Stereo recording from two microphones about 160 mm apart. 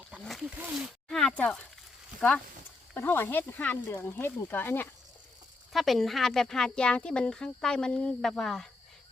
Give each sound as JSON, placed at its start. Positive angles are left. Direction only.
{"t": 0.1, "sound": "a sound", "side_deg": -5}
{"t": 2.9, "sound": "speech", "side_deg": 15}
{"t": 5.7, "sound": "speech", "side_deg": 0}